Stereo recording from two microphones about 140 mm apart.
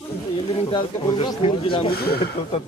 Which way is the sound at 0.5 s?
40° left (ahead or behind).